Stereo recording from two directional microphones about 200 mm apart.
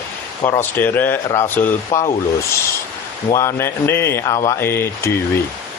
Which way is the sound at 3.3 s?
15° left (ahead or behind).